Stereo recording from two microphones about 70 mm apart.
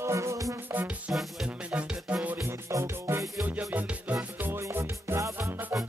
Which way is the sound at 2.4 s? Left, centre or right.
Right.